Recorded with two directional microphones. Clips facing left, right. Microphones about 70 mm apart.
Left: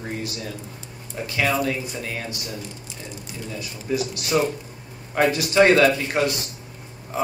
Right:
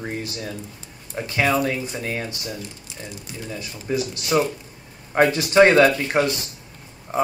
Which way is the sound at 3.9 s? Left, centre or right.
Right.